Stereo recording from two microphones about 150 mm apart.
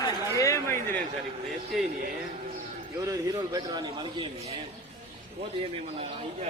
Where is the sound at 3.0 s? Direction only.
25° right (ahead or behind).